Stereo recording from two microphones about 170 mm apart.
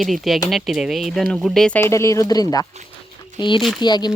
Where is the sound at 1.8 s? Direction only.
15° left (ahead or behind).